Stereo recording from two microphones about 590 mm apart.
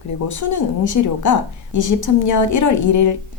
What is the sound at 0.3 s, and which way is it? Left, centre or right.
A woman's voice, left.